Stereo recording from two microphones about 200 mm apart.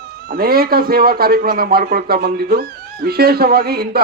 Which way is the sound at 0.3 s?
50° right (ahead or behind).